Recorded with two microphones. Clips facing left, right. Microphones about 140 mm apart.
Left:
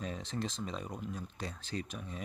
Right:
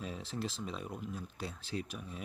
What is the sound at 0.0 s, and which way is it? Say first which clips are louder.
Speech: left 1 dB; 5° right (ahead or behind).